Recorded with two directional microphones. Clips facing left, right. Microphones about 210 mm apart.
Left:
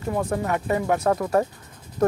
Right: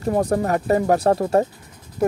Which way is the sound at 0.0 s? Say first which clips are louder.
Right 5 dB; 40° right (ahead or behind).